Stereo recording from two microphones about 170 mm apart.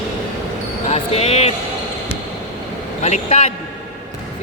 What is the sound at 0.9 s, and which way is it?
Basketball bounce, 40° left (ahead or behind).